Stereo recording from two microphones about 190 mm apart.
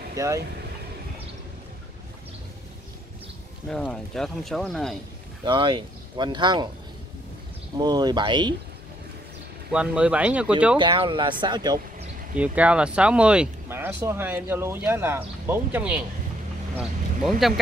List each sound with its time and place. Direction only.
0.1 s speech: 15° right (ahead or behind)
3.6 s speech: centre (ahead or behind)
5.4 s speech: 25° right (ahead or behind)
7.7 s speech: 20° right (ahead or behind)
9.7 s speech: 5° right (ahead or behind)
10.8 s speech: 25° right (ahead or behind)
12.4 s speech: 5° right (ahead or behind)